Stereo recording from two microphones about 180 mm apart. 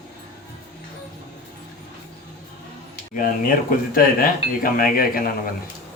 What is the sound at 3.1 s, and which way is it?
Speech, 50° left (ahead or behind).